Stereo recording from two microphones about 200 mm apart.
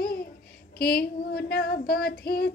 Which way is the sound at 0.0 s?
50° left (ahead or behind).